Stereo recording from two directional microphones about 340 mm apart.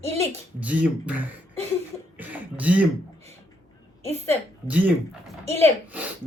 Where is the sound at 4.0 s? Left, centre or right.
Centre.